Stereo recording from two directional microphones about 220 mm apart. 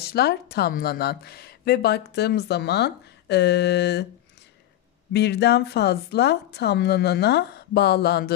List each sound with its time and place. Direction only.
0.0 s speech: 45° left (ahead or behind)
5.1 s speech: 50° left (ahead or behind)